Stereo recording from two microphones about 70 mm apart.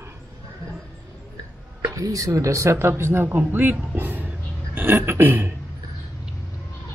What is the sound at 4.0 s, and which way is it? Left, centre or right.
Throat clearing, right.